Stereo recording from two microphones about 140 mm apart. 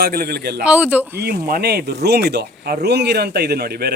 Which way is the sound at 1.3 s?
90° right.